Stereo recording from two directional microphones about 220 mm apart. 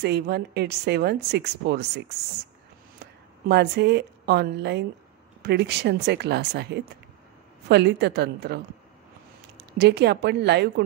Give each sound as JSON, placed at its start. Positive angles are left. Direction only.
{"t": 0.0, "sound": "a woman's voice", "side_deg": -45}
{"t": 3.4, "sound": "a woman's voice", "side_deg": -50}
{"t": 9.6, "sound": "a woman's voice", "side_deg": -50}